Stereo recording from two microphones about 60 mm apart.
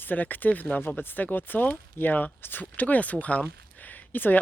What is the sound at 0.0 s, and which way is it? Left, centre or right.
Speech, left.